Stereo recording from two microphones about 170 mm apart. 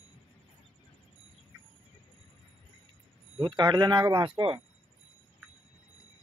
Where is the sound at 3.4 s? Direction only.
25° right (ahead or behind).